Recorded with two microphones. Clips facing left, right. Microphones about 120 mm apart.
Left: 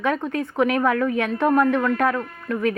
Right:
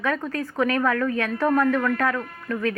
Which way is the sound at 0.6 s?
10° left (ahead or behind).